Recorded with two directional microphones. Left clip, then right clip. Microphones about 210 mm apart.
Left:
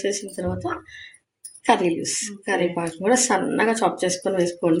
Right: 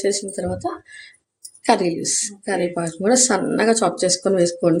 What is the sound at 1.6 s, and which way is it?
Speech, 30° right (ahead or behind).